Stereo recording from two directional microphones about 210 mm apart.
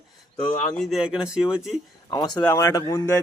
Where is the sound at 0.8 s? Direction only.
Centre (ahead or behind).